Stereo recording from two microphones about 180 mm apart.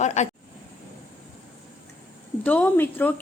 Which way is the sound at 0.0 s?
40° left (ahead or behind).